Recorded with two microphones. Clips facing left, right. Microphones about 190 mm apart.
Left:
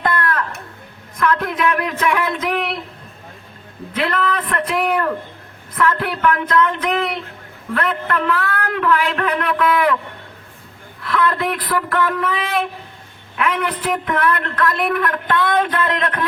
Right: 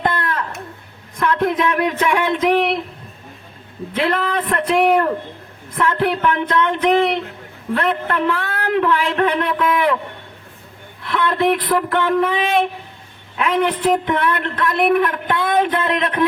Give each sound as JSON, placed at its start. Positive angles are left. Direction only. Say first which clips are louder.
{"t": 0.0, "sound": "a sound", "louder": "left 1 dB", "side_deg": -25}
{"t": 1.1, "sound": "speech", "louder": "right 2 dB", "side_deg": -30}
{"t": 3.9, "sound": "a man's voice", "louder": "right 1 dB", "side_deg": -25}
{"t": 11.0, "sound": "a man's voice", "louder": "right 2 dB", "side_deg": -25}